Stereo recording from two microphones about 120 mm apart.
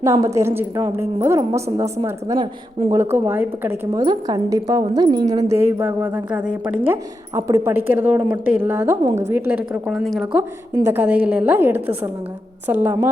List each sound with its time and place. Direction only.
0.0 s a woman's voice: 25° right (ahead or behind)
3.9 s speech: 35° right (ahead or behind)
5.5 s a woman's voice: 20° right (ahead or behind)
6.8 s a woman's voice: 25° right (ahead or behind)
9.9 s speech: centre (ahead or behind)
10.8 s a woman's voice: 15° right (ahead or behind)